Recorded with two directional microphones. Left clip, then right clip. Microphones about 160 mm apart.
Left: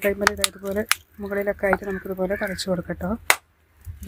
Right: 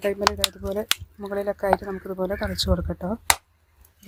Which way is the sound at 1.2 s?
10° left (ahead or behind).